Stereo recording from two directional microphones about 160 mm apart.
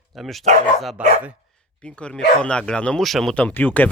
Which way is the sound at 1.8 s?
5° left (ahead or behind).